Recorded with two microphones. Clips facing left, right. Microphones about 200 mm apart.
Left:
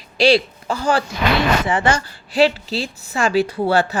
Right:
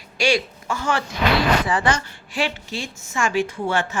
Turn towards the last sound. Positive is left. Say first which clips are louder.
# left 6 dB
turn(degrees=35)  # may be behind; listen again after turning